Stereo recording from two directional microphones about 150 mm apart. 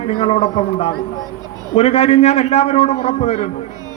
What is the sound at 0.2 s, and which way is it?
A man's voice, 45° left (ahead or behind).